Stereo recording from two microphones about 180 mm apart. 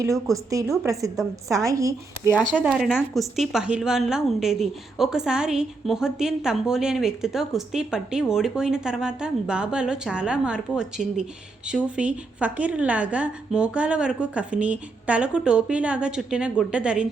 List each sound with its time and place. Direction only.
0.5 s speech: 15° right (ahead or behind)
2.3 s a woman's voice: 5° left (ahead or behind)